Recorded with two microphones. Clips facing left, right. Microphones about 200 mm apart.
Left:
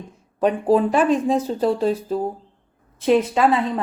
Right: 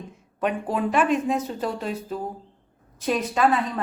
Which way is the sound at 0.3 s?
35° left (ahead or behind).